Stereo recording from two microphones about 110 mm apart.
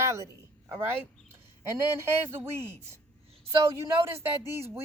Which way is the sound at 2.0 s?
20° right (ahead or behind).